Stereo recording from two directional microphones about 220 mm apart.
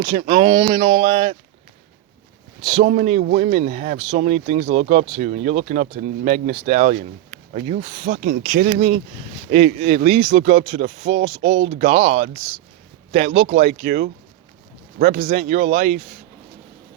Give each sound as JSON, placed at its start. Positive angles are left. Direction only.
{"t": 0.2, "sound": "speech", "side_deg": -20}
{"t": 2.8, "sound": "speech", "side_deg": -35}